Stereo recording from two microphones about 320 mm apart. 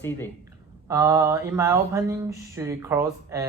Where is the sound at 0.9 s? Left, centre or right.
Centre.